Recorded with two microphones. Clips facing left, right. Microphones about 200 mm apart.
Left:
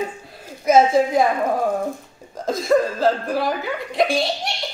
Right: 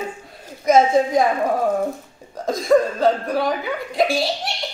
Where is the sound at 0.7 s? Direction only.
5° left (ahead or behind).